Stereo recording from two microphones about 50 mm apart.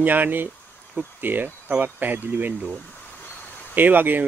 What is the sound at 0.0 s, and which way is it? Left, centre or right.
Speech, right.